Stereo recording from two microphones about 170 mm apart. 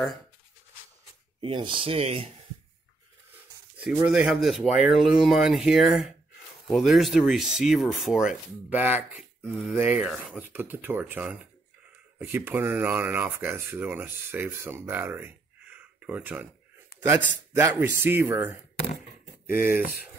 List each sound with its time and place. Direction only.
1.4 s speech: 30° right (ahead or behind)
3.7 s speech: 5° right (ahead or behind)
17.6 s speech: 15° right (ahead or behind)
19.6 s speech: 55° left (ahead or behind)